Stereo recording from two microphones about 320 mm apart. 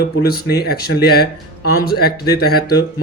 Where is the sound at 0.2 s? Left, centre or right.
Left.